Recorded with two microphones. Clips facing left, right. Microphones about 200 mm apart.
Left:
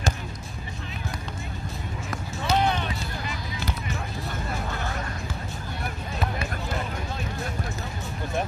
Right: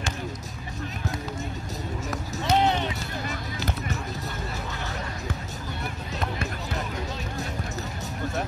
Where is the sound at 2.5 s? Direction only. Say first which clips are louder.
Right 1 dB; 20° right (ahead or behind).